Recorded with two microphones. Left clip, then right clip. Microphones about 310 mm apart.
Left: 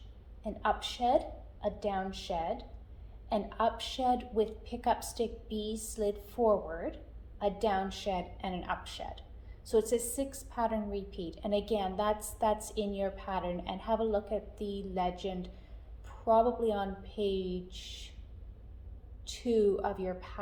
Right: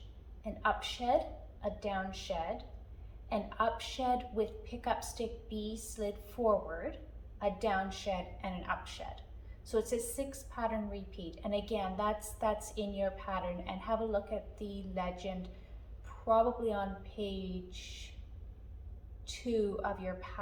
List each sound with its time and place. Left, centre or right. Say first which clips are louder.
0.4 s a woman's voice: left 1 dB; left
19.2 s a woman's voice: left 6 dB; left